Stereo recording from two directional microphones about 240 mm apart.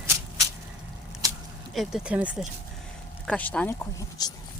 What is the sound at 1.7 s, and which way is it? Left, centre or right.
Speech, centre.